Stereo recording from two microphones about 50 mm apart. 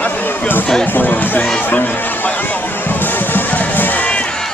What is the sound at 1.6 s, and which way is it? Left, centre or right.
Music, left.